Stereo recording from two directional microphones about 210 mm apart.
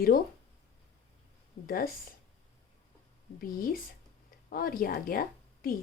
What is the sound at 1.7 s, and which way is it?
Speech, 45° left (ahead or behind).